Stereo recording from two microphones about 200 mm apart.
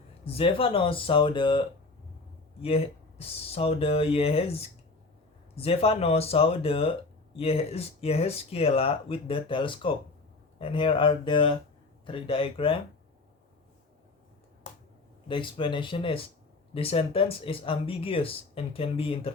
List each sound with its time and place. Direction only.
0.3 s speech: 30° left (ahead or behind)
15.3 s speech: 25° left (ahead or behind)